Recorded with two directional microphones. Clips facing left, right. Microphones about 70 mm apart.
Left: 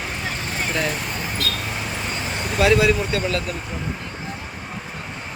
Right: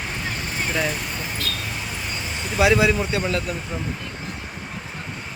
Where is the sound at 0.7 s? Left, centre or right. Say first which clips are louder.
Even; centre.